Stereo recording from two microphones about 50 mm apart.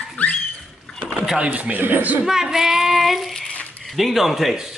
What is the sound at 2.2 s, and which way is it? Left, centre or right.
Child singing, centre.